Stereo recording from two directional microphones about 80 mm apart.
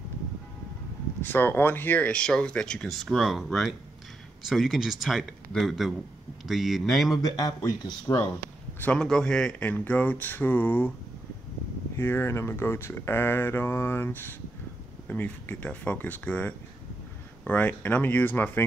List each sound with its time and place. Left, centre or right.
1.2 s speech: left; by 7.2 s centre
7.2 s speech: left
8.9 s speech: centre
9.6 s speech: left
12.0 s speech: left